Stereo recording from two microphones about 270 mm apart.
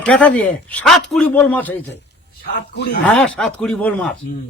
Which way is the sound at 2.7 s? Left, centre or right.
Left.